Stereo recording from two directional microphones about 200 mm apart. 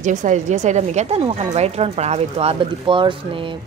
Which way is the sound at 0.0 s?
40° right (ahead or behind).